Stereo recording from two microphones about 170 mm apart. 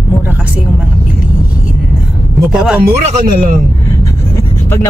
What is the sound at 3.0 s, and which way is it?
Speech, 45° right (ahead or behind).